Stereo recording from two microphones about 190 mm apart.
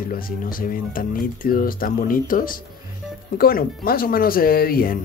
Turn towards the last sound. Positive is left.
turn(degrees=50)  # may be behind; listen again after turning